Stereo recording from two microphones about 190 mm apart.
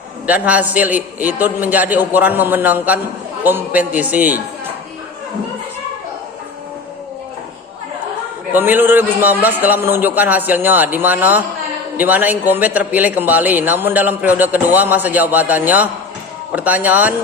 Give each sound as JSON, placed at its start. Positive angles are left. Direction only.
{"t": 0.3, "sound": "a man's voice", "side_deg": -5}
{"t": 8.5, "sound": "a man's voice", "side_deg": -10}